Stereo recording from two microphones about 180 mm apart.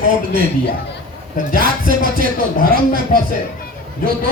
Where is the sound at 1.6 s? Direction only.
50° right (ahead or behind).